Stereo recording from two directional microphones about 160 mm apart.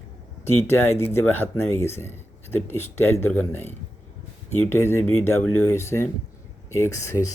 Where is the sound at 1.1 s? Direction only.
10° left (ahead or behind).